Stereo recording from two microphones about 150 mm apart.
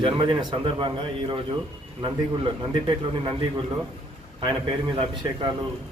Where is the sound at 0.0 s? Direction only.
30° right (ahead or behind).